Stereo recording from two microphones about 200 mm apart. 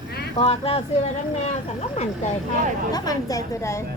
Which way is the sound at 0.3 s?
30° left (ahead or behind).